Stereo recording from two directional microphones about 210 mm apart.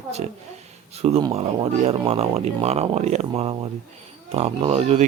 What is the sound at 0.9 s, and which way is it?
Speech, 30° right (ahead or behind).